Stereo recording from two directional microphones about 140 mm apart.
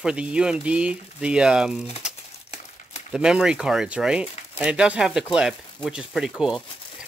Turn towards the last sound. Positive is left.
turn(degrees=-5)  # may be behind; listen again after turning